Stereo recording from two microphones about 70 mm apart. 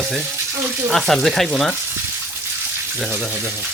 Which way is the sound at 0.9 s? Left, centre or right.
Centre.